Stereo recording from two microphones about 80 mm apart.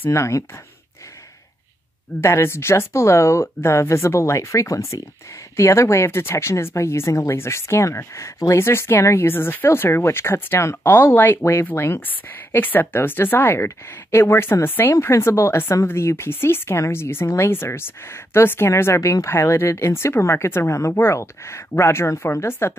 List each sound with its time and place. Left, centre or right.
0.1 s speech: left
2.1 s speech: left